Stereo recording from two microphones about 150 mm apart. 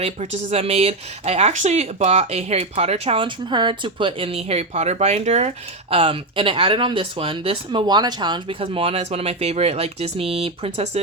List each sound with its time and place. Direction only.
0.0 s speech: 45° right (ahead or behind)